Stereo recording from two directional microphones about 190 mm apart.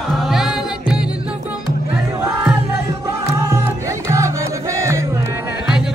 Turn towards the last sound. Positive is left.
turn(degrees=-15)  # may be behind; listen again after turning